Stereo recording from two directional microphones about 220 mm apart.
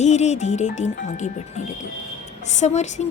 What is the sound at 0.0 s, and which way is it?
A woman's voice, 30° left (ahead or behind).